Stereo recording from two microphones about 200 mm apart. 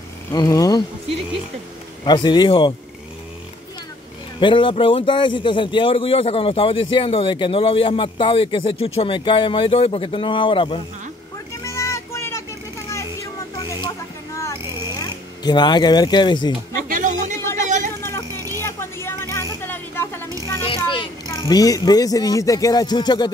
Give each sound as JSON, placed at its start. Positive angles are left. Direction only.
{"t": 0.3, "sound": "a man's voice", "side_deg": 15}
{"t": 2.0, "sound": "a man's voice", "side_deg": 20}
{"t": 4.4, "sound": "a man's voice", "side_deg": 25}
{"t": 11.6, "sound": "vehicle", "side_deg": 15}
{"t": 13.6, "sound": "a sound", "side_deg": 20}
{"t": 15.0, "sound": "speech", "side_deg": 20}
{"t": 16.9, "sound": "a sound", "side_deg": -40}
{"t": 17.4, "sound": "a sound", "side_deg": 10}
{"t": 20.6, "sound": "a child's voice", "side_deg": 25}